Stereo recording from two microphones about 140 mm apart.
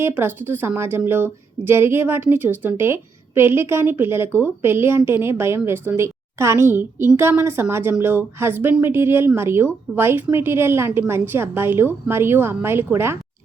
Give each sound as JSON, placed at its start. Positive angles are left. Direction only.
{"t": 0.0, "sound": "a woman's voice", "side_deg": -15}